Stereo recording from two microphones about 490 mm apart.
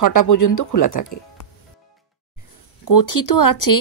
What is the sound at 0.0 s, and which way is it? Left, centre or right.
Speech, left.